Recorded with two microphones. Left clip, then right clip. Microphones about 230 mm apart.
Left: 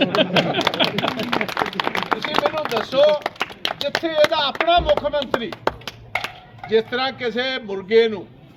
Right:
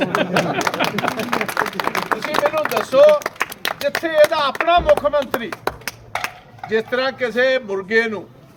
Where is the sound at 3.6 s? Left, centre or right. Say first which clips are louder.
Even; centre.